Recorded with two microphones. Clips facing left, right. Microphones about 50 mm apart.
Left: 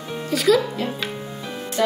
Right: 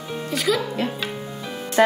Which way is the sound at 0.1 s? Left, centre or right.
Centre.